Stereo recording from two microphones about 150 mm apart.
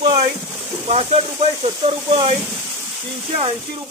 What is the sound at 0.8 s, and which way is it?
Speech, 40° right (ahead or behind).